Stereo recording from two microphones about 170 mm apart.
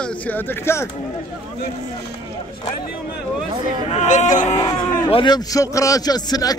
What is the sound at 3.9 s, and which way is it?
Speech, 45° left (ahead or behind).